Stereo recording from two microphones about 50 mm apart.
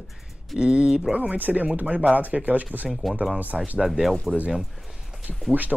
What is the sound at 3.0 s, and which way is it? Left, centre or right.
Speech, centre.